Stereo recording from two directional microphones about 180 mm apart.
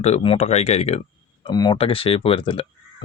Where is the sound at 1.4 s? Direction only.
25° left (ahead or behind).